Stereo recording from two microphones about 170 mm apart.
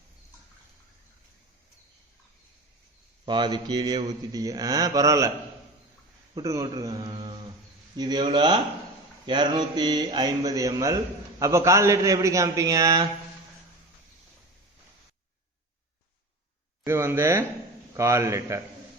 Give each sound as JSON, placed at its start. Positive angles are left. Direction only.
{"t": 3.2, "sound": "speech", "side_deg": -25}
{"t": 6.3, "sound": "speech", "side_deg": -20}
{"t": 16.8, "sound": "speech", "side_deg": -15}